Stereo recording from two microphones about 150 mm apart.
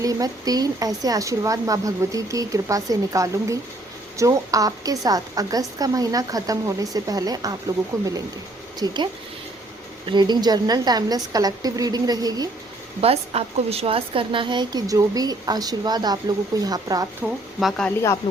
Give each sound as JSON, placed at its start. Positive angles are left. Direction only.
{"t": 0.0, "sound": "speech", "side_deg": -25}
{"t": 10.1, "sound": "speech", "side_deg": -30}
{"t": 13.0, "sound": "speech", "side_deg": -40}
{"t": 17.6, "sound": "speech", "side_deg": 0}